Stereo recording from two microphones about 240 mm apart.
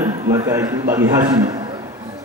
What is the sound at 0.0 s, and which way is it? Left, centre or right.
A man's voice, centre.